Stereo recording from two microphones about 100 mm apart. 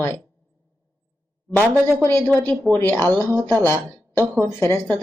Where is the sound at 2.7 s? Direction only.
25° left (ahead or behind).